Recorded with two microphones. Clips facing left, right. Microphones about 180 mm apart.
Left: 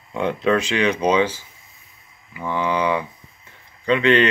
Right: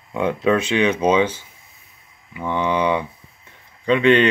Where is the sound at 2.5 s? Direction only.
20° right (ahead or behind).